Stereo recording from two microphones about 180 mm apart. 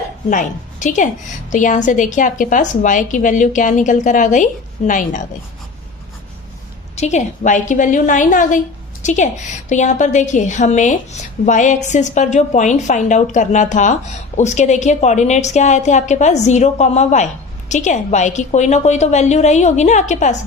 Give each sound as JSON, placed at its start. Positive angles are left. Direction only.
{"t": 0.3, "sound": "a woman's voice", "side_deg": 45}
{"t": 6.9, "sound": "a woman's voice", "side_deg": 40}